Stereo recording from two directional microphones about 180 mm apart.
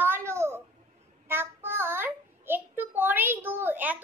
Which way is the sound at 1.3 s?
10° right (ahead or behind).